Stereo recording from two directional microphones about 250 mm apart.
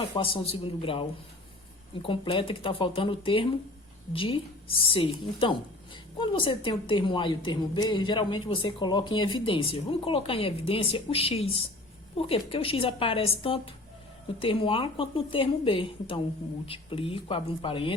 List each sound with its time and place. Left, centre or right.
0.1 s a woman's voice: left